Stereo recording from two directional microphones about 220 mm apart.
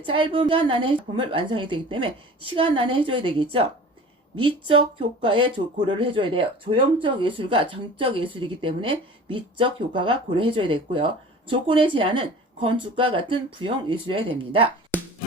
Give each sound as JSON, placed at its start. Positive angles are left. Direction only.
{"t": 0.0, "sound": "speech", "side_deg": -25}